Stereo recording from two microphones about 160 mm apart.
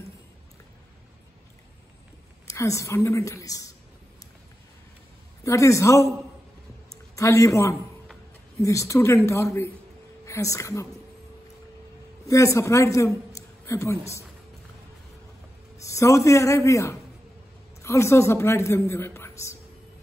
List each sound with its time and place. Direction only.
2.4 s a woman's voice: 20° left (ahead or behind)
5.4 s a woman's voice: 20° left (ahead or behind)
7.2 s a woman's voice: 20° left (ahead or behind)
12.3 s a man's voice: 20° left (ahead or behind)
15.8 s a man's voice: 20° left (ahead or behind)